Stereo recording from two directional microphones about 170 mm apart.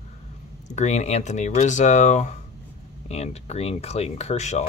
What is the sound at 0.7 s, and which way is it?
Speech, 40° left (ahead or behind).